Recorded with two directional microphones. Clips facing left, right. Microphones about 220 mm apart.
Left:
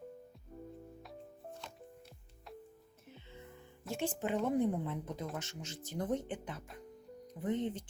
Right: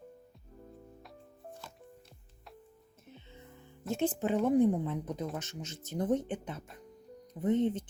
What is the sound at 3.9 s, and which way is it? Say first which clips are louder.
Speech: right 5 dB; 20° right (ahead or behind).